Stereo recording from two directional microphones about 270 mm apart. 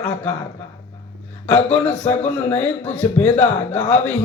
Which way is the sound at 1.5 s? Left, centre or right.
Centre.